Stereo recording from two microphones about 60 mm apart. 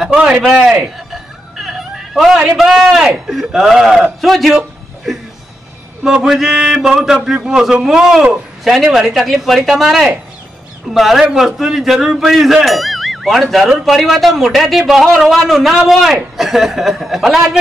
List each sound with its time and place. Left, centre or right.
0.1 s a man's voice: right
1.6 s speech: centre
4.6 s a sound: centre
6.0 s a man's voice: centre